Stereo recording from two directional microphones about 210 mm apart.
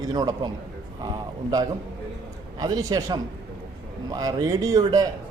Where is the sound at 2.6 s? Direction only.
15° right (ahead or behind).